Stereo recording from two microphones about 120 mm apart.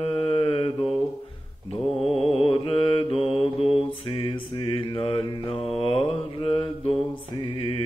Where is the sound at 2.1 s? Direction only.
55° left (ahead or behind).